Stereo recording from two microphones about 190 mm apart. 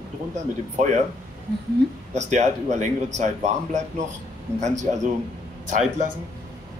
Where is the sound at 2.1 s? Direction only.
40° right (ahead or behind).